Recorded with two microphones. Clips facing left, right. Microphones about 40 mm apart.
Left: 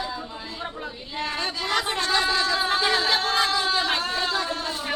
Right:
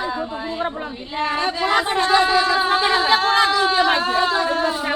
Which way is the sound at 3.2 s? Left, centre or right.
Right.